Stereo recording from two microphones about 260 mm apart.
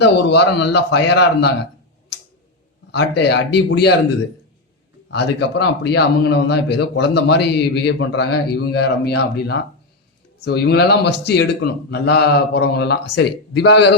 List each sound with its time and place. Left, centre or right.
0.0 s a man's voice: left
2.9 s a man's voice: left
5.1 s a man's voice: left